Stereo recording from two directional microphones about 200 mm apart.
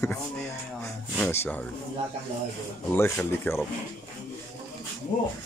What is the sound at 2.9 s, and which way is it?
Speech, 10° left (ahead or behind).